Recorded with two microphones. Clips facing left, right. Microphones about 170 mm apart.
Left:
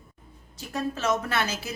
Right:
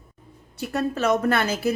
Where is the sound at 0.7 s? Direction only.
60° right (ahead or behind).